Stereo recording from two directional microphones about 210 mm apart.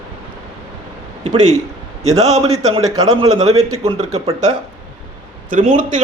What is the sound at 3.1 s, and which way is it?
Speech, 30° right (ahead or behind).